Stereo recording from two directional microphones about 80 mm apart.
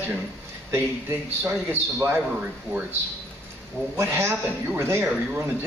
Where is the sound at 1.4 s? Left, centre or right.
Right.